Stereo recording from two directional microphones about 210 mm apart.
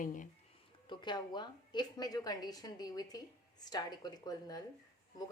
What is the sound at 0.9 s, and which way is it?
A woman's voice, 20° left (ahead or behind).